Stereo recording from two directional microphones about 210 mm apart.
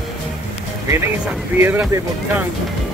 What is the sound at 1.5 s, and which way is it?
Speech, 10° right (ahead or behind).